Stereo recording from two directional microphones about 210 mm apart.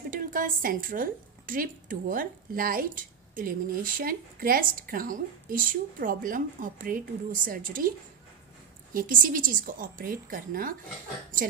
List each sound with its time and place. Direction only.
0.1 s a woman's voice: 40° right (ahead or behind)
8.9 s a woman's voice: 40° right (ahead or behind)